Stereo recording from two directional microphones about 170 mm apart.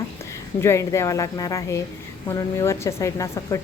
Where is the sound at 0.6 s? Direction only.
15° left (ahead or behind).